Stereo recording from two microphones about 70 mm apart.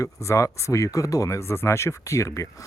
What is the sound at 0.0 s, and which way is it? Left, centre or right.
Speech, left.